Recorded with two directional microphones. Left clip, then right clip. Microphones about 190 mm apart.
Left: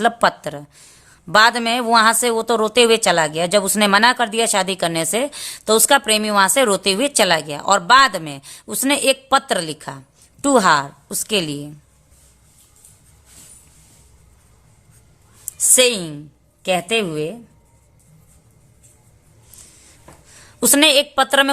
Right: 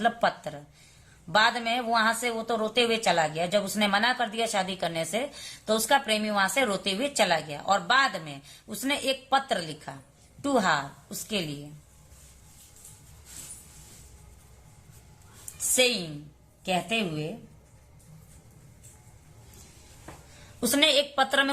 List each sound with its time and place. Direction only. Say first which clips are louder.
0.0 s a woman's voice: left 9 dB; 50° left (ahead or behind)
15.7 s a woman's voice: left 9 dB; 55° left (ahead or behind)
20.6 s a woman's voice: left 9 dB; 50° left (ahead or behind)